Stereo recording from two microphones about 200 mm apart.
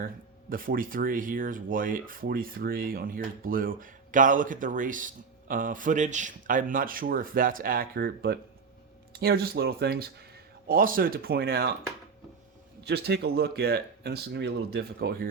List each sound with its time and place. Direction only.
0.5 s speech: 45° right (ahead or behind)
12.8 s speech: 55° right (ahead or behind)